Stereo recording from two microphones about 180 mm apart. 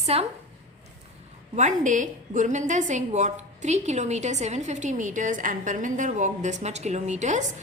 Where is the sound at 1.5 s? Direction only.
45° right (ahead or behind).